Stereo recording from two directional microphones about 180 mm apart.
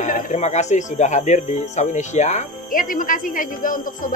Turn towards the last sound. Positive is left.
turn(degrees=50)  # may be behind; listen again after turning